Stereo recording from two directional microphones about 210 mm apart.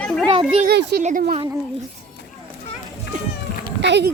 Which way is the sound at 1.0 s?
35° right (ahead or behind).